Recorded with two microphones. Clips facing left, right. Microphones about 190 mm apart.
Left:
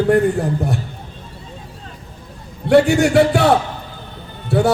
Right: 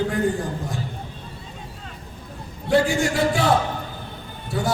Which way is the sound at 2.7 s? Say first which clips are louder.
Left 8 dB; 70° left (ahead or behind).